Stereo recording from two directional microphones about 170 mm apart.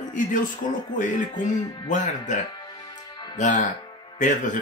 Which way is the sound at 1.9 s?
45° left (ahead or behind).